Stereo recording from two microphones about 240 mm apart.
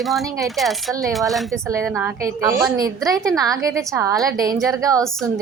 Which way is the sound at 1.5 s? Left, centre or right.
Centre.